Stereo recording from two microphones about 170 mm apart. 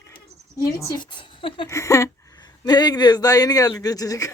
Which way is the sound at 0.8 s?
20° left (ahead or behind).